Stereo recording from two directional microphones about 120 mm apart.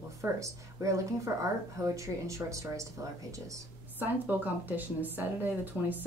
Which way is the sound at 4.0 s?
15° right (ahead or behind).